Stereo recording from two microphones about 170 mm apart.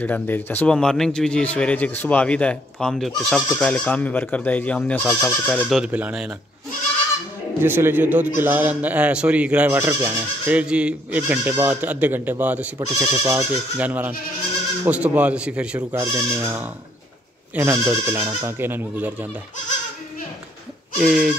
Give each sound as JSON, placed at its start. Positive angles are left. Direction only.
{"t": 0.0, "sound": "speech", "side_deg": 10}
{"t": 5.8, "sound": "speech", "side_deg": -5}
{"t": 7.6, "sound": "speech", "side_deg": -10}
{"t": 21.0, "sound": "speech", "side_deg": 0}